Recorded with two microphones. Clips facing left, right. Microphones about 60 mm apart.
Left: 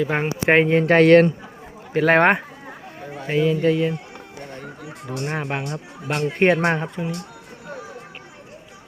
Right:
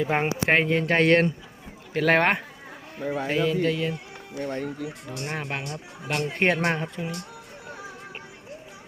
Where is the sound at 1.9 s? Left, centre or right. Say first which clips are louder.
Left 5 dB; centre.